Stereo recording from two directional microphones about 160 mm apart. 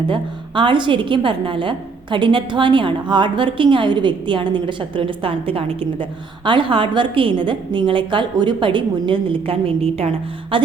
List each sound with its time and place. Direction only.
0.1 s a woman's voice: 30° right (ahead or behind)